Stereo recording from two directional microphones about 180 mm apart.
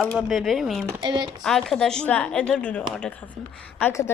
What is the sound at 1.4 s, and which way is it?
Speech, centre (ahead or behind).